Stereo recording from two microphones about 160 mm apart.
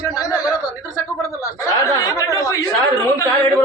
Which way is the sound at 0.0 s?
25° left (ahead or behind).